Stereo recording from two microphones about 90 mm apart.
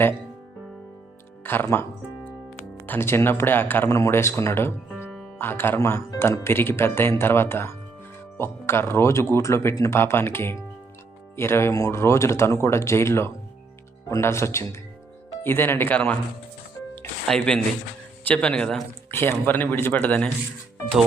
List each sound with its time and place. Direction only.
1.5 s speech: 25° left (ahead or behind)
3.8 s speech: 35° left (ahead or behind); by 16.1 s 20° left (ahead or behind)
17.2 s a man's voice: 10° left (ahead or behind)
19.1 s speech: 25° left (ahead or behind)